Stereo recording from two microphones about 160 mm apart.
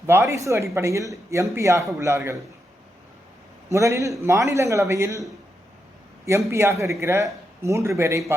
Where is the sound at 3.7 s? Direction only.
20° right (ahead or behind).